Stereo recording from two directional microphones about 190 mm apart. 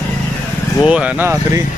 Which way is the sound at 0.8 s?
5° right (ahead or behind).